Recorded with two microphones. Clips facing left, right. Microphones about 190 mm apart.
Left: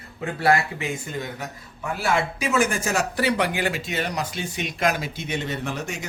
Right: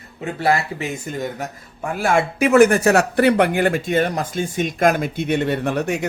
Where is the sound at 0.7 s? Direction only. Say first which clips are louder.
Right 3 dB; 45° right (ahead or behind); by 6.0 s 65° right (ahead or behind).